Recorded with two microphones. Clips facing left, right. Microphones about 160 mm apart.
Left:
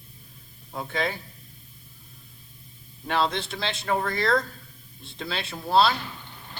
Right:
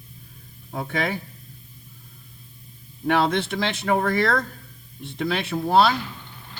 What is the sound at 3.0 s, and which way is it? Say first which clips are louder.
A man's voice: right 5 dB; 60° right (ahead or behind).